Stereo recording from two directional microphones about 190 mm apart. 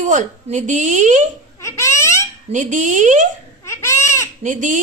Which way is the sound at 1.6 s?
15° left (ahead or behind).